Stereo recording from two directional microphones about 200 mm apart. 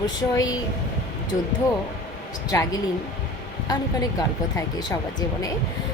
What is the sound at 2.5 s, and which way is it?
A woman's voice, 15° left (ahead or behind).